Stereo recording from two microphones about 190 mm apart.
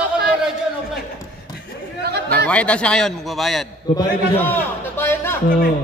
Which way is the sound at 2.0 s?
60° right (ahead or behind).